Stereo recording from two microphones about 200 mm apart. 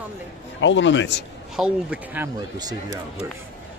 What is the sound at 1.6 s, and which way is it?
Speech, 5° right (ahead or behind).